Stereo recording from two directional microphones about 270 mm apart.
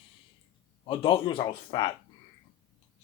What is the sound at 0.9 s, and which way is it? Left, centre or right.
Speech, centre.